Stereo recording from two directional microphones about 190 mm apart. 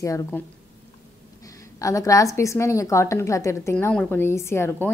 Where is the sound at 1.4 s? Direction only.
15° left (ahead or behind).